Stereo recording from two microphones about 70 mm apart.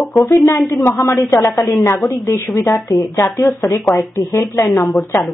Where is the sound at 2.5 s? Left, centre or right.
Left.